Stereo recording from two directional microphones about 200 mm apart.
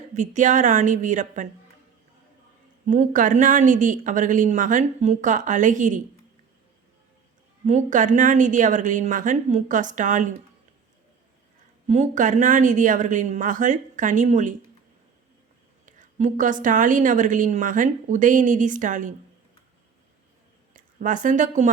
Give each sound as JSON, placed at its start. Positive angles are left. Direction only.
{"t": 0.1, "sound": "a woman's voice", "side_deg": -40}
{"t": 2.8, "sound": "a woman's voice", "side_deg": -35}
{"t": 7.6, "sound": "a woman's voice", "side_deg": -35}
{"t": 11.9, "sound": "a woman's voice", "side_deg": -35}
{"t": 15.9, "sound": "a woman's voice", "side_deg": -40}
{"t": 20.7, "sound": "speech", "side_deg": -40}